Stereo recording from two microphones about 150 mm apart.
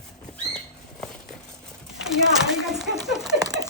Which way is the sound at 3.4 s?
25° right (ahead or behind).